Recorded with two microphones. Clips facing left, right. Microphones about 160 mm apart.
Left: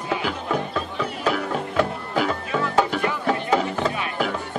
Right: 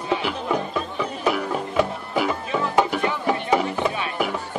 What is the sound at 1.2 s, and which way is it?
Music, 10° right (ahead or behind).